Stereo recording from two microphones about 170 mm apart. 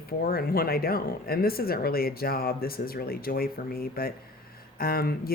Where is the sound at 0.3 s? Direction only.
60° left (ahead or behind).